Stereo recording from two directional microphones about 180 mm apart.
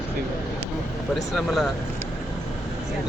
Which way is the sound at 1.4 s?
Centre (ahead or behind).